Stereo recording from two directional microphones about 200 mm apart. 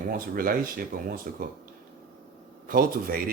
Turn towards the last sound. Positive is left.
turn(degrees=-45)  # may be behind; listen again after turning